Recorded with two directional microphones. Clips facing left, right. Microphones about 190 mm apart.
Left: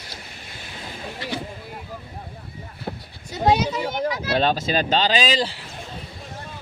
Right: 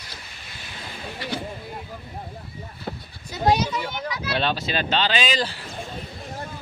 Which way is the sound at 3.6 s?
35° left (ahead or behind).